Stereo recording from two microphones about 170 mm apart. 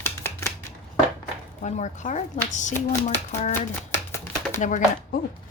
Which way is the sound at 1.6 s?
45° left (ahead or behind).